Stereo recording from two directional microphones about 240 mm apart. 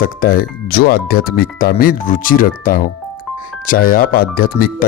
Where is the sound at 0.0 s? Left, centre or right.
Left.